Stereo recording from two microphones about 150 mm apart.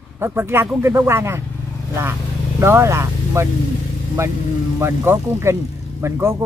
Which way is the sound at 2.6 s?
20° right (ahead or behind).